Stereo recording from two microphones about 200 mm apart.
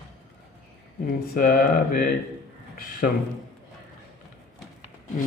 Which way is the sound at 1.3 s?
45° left (ahead or behind).